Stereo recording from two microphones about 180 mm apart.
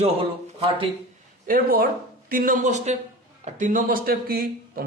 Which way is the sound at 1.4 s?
50° right (ahead or behind).